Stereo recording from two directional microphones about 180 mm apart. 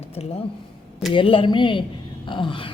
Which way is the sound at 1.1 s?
30° left (ahead or behind).